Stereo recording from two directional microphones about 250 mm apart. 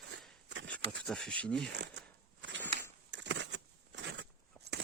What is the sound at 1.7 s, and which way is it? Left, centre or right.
Speech, right.